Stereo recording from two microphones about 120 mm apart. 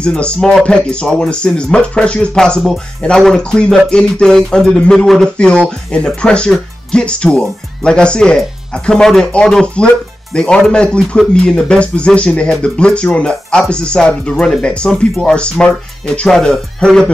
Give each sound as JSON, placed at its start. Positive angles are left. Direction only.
{"t": 0.0, "sound": "speech", "side_deg": 5}